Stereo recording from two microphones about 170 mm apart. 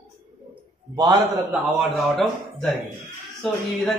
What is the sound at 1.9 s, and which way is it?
A man's voice, centre (ahead or behind).